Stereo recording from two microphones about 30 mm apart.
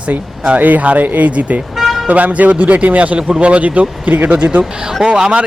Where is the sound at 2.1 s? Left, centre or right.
Right.